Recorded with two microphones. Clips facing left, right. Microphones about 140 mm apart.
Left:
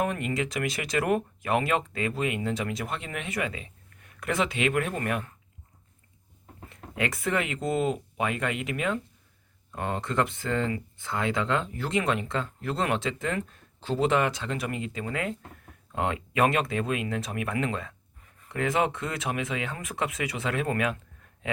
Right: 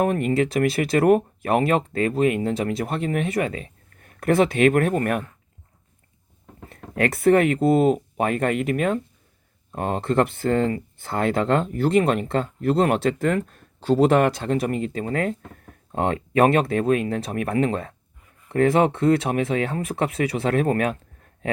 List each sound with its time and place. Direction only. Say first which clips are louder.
0.0 s speech: right 8 dB; 40° right (ahead or behind)
3.3 s a sound: right 7 dB; 40° right (ahead or behind)
4.5 s speech: right 9 dB; 50° right (ahead or behind)
6.7 s a sound: right 8 dB; 50° right (ahead or behind)
7.3 s speech: right 14 dB; 50° right (ahead or behind)
10.2 s speech: right 7 dB; 55° right (ahead or behind)